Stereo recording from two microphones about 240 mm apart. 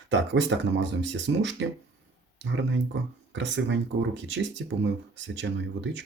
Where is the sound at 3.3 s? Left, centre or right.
Right.